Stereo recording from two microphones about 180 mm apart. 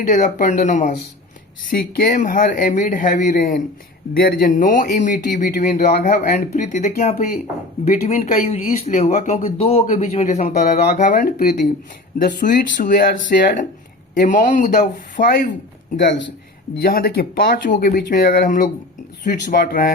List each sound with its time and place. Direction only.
0.0 s speech: 45° left (ahead or behind)
2.0 s speech: 50° left (ahead or behind)
12.2 s speech: 45° left (ahead or behind)
16.8 s speech: 55° left (ahead or behind)